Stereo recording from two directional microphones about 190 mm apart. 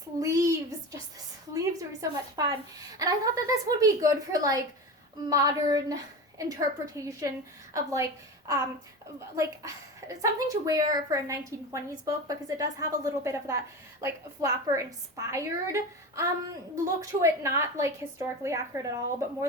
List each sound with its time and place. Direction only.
0.2 s a sound: 15° right (ahead or behind)
1.5 s a woman's voice: 20° right (ahead or behind)
5.3 s child singing: 20° right (ahead or behind)
6.5 s a woman's voice: 20° right (ahead or behind)
9.3 s a woman's voice: 20° right (ahead or behind)